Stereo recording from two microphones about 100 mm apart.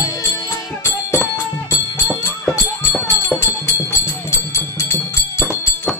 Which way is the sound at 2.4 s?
20° left (ahead or behind).